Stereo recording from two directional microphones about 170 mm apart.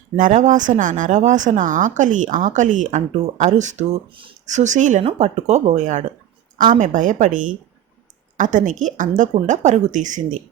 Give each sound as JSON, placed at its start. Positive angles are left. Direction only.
{"t": 0.2, "sound": "a woman's voice", "side_deg": -50}